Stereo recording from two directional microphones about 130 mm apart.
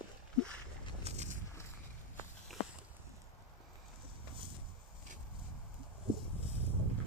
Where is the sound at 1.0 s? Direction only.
55° right (ahead or behind).